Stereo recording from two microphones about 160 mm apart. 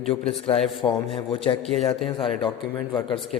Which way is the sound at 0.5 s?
Centre (ahead or behind).